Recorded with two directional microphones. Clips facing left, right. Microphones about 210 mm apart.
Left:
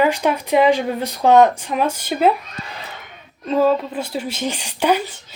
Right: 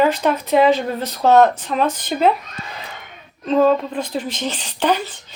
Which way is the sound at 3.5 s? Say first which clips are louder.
Right 1 dB; 5° left (ahead or behind).